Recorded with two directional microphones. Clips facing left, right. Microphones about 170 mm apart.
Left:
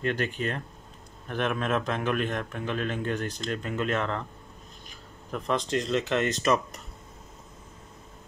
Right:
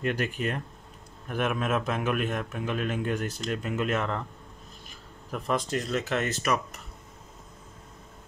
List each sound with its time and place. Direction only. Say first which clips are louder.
0.0 s a man's voice: even; 10° right (ahead or behind)
5.3 s speech: left 1 dB; 5° right (ahead or behind)
5.9 s speech: left 2 dB; 25° left (ahead or behind)